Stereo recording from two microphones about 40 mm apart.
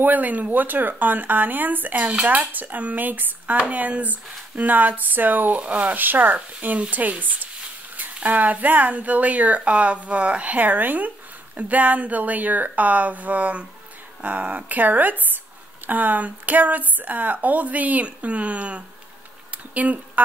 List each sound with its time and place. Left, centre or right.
0.0 s speech: right
3.5 s speech: right
5.6 s speech: right
5.9 s speech: right
6.3 s speech: right
19.5 s a sound: right